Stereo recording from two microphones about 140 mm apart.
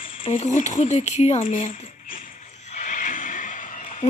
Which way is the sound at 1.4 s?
65° left (ahead or behind).